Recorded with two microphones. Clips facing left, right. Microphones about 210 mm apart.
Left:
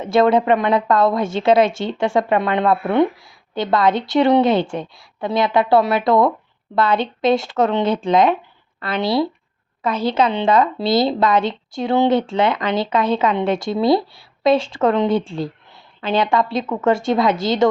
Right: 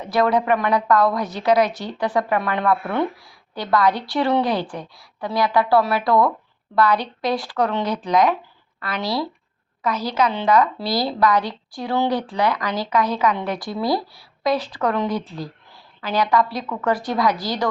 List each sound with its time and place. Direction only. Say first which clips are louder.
0.0 s a woman's voice: left 5 dB; 25° left (ahead or behind)